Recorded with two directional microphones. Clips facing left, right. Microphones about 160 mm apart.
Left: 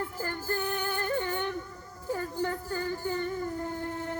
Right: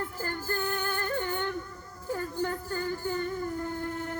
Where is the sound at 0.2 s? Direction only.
20° left (ahead or behind).